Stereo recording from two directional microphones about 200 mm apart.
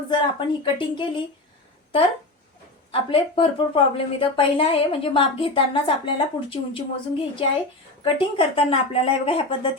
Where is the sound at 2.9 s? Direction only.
25° left (ahead or behind).